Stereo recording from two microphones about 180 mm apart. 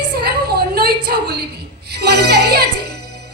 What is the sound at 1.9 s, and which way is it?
Speech, 65° right (ahead or behind).